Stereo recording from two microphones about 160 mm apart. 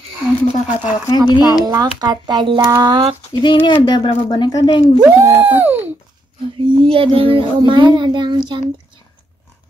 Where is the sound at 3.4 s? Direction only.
30° left (ahead or behind).